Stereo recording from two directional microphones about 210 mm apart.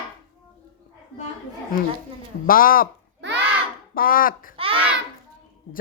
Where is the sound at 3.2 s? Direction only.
55° right (ahead or behind).